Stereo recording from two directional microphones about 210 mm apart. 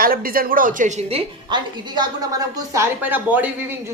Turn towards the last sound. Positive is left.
turn(degrees=-10)  # may be behind; listen again after turning